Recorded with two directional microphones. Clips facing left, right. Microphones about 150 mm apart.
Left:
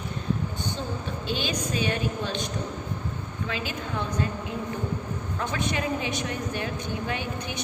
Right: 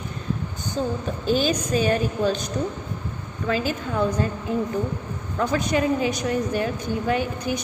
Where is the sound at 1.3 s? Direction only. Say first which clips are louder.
Right 8 dB; 40° right (ahead or behind).